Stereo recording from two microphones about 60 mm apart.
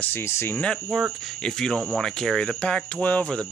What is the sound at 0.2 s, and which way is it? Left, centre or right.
Speech, left.